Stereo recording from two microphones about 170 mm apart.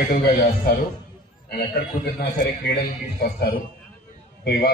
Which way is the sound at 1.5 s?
65° left (ahead or behind).